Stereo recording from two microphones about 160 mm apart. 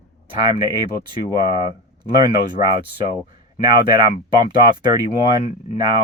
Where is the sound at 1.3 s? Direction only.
25° right (ahead or behind).